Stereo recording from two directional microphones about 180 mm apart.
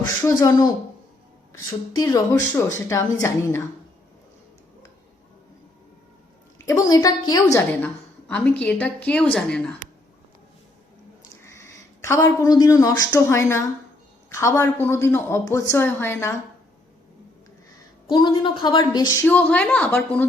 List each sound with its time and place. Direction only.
0.0 s a woman's voice: 20° left (ahead or behind)
2.0 s a woman's voice: 20° left (ahead or behind)
6.7 s a woman's voice: 20° left (ahead or behind)
11.4 s a woman's voice: 15° left (ahead or behind)
18.1 s a woman's voice: 25° left (ahead or behind)
19.2 s a woman's voice: 10° left (ahead or behind)